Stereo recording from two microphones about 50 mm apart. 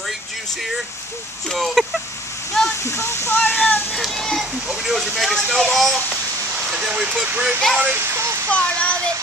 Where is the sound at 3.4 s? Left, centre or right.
Left.